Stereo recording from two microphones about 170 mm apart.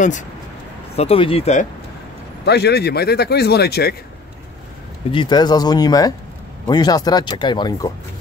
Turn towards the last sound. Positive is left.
turn(degrees=25)  # may be behind; listen again after turning